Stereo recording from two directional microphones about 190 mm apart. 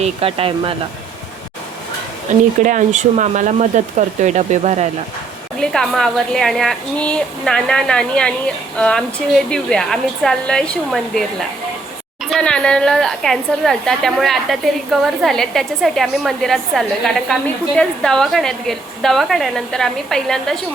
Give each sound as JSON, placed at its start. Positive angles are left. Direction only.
{"t": 0.0, "sound": "speech", "side_deg": -30}
{"t": 2.6, "sound": "speech", "side_deg": -40}
{"t": 5.5, "sound": "a woman's voice", "side_deg": 5}